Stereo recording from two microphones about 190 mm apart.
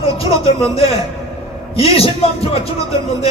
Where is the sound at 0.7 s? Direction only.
30° left (ahead or behind).